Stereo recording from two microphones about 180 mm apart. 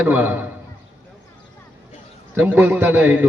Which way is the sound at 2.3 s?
10° right (ahead or behind).